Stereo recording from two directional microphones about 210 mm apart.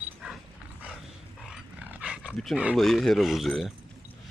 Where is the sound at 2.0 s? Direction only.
5° right (ahead or behind).